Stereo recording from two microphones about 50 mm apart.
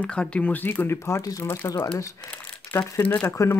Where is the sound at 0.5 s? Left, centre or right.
Left.